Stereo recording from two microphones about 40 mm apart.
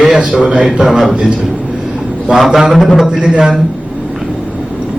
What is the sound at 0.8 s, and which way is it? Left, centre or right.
Speech, centre.